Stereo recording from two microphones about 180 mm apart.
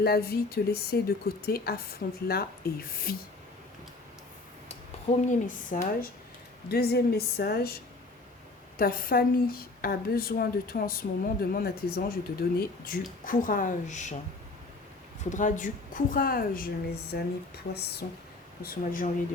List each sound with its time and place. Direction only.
0.0 s a woman's voice: 60° left (ahead or behind)
5.2 s a woman's voice: 45° left (ahead or behind)
6.7 s a woman's voice: 60° left (ahead or behind)
8.8 s a woman's voice: 55° left (ahead or behind)
15.2 s a woman's voice: 45° left (ahead or behind)